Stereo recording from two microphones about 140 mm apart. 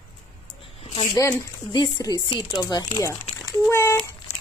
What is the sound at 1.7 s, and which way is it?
Speech, 30° left (ahead or behind).